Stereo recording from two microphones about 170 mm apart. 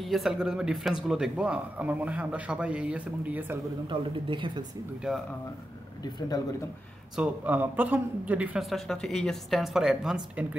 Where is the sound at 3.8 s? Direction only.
30° right (ahead or behind).